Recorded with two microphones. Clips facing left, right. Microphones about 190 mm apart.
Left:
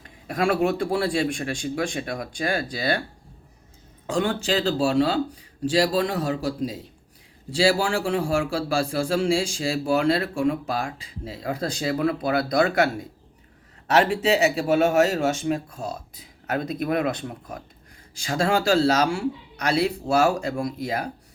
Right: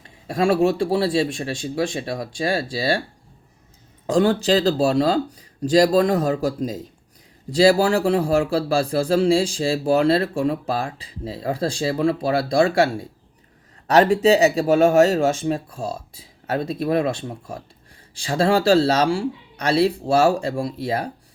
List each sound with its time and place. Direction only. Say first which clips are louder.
0.0 s speech: right 3 dB; 25° right (ahead or behind)
4.0 s a man's voice: right 6 dB; 35° right (ahead or behind)